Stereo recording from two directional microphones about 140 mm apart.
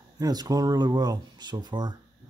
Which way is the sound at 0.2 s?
25° right (ahead or behind).